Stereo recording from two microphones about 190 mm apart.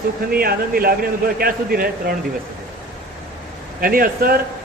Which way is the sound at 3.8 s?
50° right (ahead or behind).